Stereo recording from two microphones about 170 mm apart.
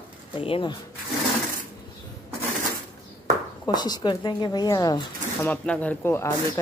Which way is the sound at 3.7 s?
25° left (ahead or behind).